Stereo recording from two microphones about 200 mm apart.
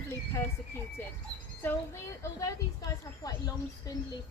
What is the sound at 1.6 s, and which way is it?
Speech, 15° left (ahead or behind).